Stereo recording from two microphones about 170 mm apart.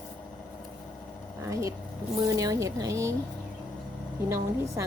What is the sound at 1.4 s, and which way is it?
Speech, 20° right (ahead or behind).